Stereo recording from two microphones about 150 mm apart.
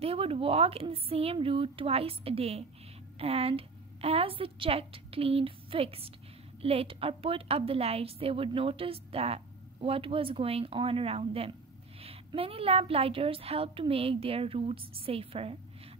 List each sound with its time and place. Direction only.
0.0 s a woman's voice: 40° right (ahead or behind)